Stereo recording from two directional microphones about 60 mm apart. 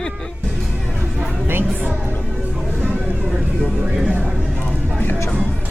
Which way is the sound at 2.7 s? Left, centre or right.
Right.